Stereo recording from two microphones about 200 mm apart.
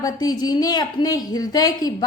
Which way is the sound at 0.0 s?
20° left (ahead or behind).